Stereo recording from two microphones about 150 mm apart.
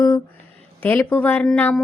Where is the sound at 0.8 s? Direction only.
10° left (ahead or behind).